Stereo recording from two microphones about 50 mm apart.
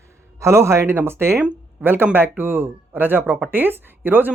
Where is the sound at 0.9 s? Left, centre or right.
Right.